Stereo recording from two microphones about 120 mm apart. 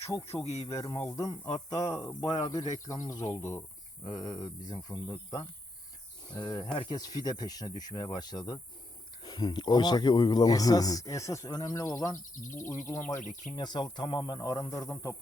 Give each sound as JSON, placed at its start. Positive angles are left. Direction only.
{"t": 0.0, "sound": "speech", "side_deg": 25}
{"t": 6.3, "sound": "speech", "side_deg": 35}
{"t": 13.2, "sound": "speech", "side_deg": 90}
{"t": 13.6, "sound": "speech", "side_deg": 35}